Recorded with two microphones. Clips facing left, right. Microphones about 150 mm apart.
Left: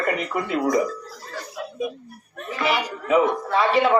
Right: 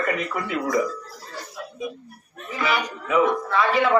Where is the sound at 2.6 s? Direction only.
30° left (ahead or behind).